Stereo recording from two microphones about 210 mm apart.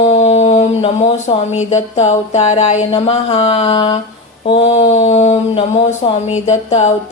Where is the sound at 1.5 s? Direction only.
35° left (ahead or behind).